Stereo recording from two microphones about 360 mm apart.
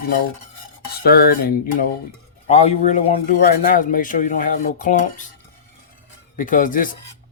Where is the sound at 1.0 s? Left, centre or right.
Left.